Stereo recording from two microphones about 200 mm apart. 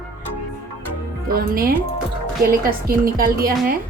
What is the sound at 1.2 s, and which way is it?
Speech, 45° right (ahead or behind).